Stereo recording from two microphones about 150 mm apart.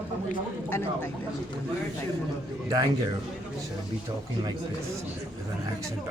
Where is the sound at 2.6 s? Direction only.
25° right (ahead or behind).